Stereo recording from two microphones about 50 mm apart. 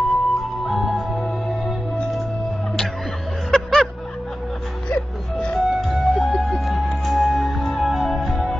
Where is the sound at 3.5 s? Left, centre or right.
Centre.